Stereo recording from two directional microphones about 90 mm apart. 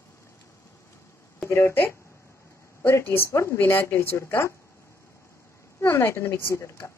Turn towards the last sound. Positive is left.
turn(degrees=30)  # may be behind; listen again after turning